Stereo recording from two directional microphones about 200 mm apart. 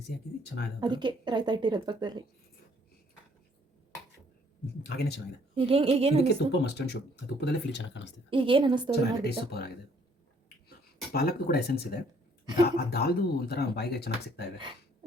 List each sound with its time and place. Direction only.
0.1 s speech: 55° left (ahead or behind)
0.8 s speech: 20° right (ahead or behind)
4.8 s speech: 55° left (ahead or behind)
5.5 s speech: 30° right (ahead or behind)
6.2 s speech: 55° left (ahead or behind)
8.3 s speech: 25° right (ahead or behind)
9.2 s speech: 55° left (ahead or behind)